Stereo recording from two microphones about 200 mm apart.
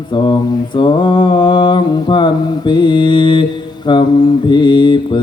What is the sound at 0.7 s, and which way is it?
Mantra, 25° left (ahead or behind).